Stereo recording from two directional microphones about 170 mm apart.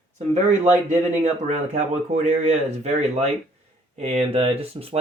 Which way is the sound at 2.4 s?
40° right (ahead or behind).